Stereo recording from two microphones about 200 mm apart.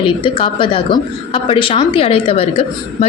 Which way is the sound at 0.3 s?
25° left (ahead or behind).